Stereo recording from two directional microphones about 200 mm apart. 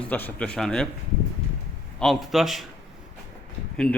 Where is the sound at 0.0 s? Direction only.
10° left (ahead or behind).